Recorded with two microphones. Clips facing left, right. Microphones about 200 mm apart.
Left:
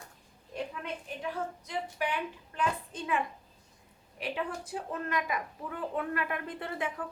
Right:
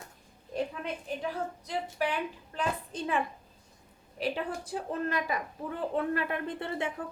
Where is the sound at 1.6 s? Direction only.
35° right (ahead or behind).